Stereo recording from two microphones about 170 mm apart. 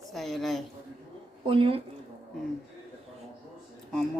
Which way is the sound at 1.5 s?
35° right (ahead or behind).